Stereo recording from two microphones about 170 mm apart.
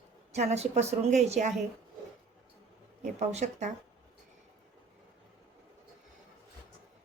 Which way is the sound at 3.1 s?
40° right (ahead or behind).